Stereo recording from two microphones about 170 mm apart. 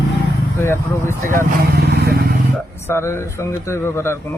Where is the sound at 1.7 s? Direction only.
70° right (ahead or behind).